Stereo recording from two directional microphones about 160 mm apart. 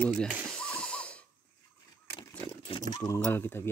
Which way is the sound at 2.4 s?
30° left (ahead or behind).